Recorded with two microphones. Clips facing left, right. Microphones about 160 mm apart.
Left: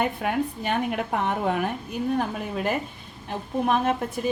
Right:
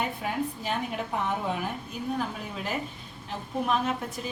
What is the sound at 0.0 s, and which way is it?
A woman's voice, 60° left (ahead or behind).